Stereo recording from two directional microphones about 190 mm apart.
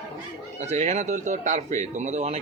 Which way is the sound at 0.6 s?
35° right (ahead or behind).